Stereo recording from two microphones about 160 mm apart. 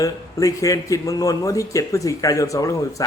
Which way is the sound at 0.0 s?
20° left (ahead or behind).